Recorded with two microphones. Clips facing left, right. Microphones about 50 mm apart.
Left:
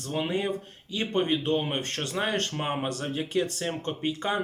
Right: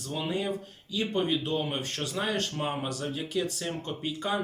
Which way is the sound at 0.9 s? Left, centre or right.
Left.